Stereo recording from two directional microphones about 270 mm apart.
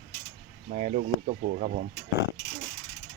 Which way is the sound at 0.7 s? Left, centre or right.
Right.